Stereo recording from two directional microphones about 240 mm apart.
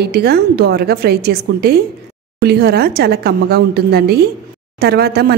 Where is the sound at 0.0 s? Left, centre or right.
Right.